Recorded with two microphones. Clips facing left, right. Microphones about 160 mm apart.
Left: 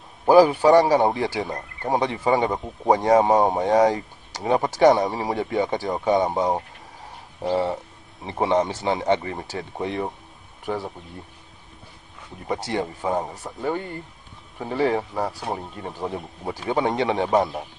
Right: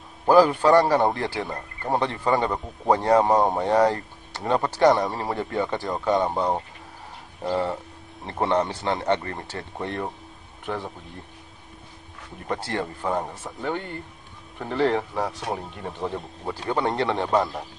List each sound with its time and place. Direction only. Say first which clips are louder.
0.3 s speech: left 2 dB; 15° left (ahead or behind)
12.4 s speech: left 2 dB; 15° left (ahead or behind)